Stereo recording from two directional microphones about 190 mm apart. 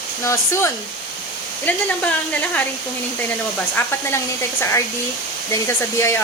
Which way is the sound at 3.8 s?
15° left (ahead or behind).